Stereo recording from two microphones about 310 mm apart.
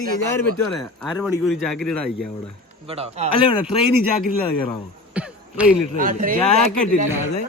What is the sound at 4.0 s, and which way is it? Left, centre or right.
Speech, left.